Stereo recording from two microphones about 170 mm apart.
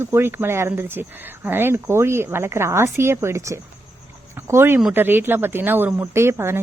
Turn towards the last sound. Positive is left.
turn(degrees=-15)  # may be behind; listen again after turning